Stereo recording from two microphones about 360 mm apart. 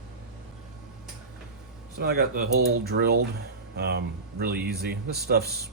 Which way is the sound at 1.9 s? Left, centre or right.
Right.